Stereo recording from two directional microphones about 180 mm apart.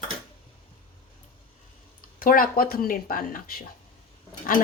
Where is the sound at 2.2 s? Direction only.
50° left (ahead or behind).